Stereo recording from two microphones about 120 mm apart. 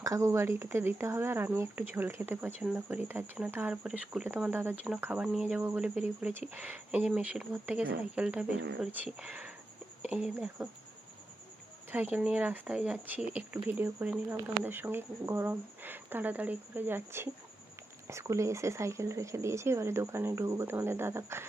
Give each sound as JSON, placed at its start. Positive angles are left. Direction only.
{"t": 0.0, "sound": "speech", "side_deg": -25}
{"t": 11.9, "sound": "speech", "side_deg": -15}